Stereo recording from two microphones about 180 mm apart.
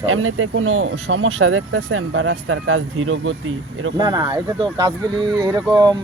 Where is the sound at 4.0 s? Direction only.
25° right (ahead or behind).